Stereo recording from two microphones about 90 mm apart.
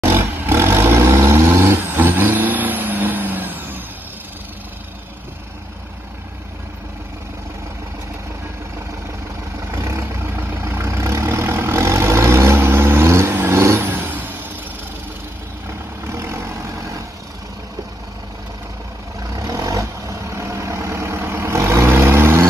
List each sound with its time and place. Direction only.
0.0 s vehicle: 25° right (ahead or behind)
9.8 s vehicle: 30° right (ahead or behind)
16.1 s vehicle: 30° right (ahead or behind)
19.3 s vehicle: 40° right (ahead or behind)